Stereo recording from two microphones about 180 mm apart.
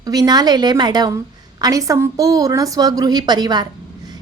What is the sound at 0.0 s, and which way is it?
A woman's voice, 20° right (ahead or behind).